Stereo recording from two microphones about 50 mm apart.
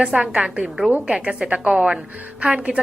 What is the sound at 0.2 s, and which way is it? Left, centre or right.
A woman's voice, centre.